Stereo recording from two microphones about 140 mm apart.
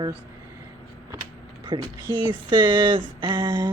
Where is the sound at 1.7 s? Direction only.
35° right (ahead or behind).